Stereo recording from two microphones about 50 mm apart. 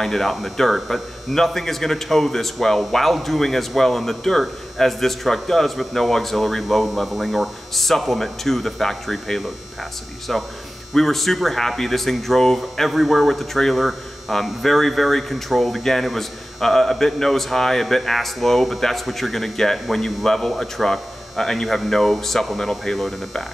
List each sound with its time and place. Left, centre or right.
0.0 s a man's voice: centre